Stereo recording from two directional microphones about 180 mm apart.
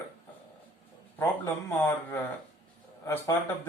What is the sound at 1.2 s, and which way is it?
Speech, 15° left (ahead or behind).